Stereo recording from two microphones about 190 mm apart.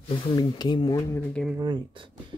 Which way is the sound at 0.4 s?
20° left (ahead or behind).